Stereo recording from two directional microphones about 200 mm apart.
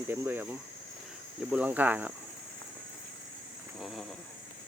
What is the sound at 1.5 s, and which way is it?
Speech, 10° right (ahead or behind).